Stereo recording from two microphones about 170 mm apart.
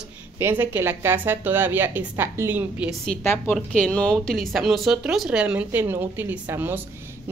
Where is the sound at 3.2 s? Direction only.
10° left (ahead or behind); by 6.8 s 10° right (ahead or behind).